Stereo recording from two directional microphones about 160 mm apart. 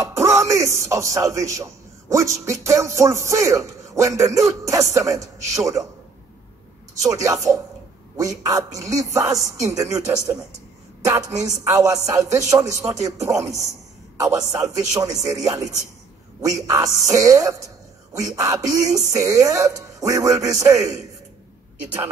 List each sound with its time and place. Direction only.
0.0 s speech: 15° right (ahead or behind)
7.0 s a woman's voice: 20° right (ahead or behind)